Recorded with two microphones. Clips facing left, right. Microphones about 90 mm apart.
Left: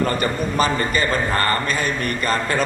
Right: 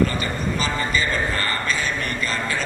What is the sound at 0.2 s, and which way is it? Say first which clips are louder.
A man's voice: left 5 dB; 50° left (ahead or behind).